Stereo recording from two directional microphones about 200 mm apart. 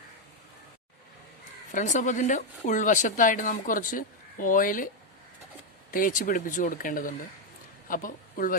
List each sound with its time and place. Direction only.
1.7 s a woman's voice: 40° left (ahead or behind)
5.9 s speech: 45° left (ahead or behind)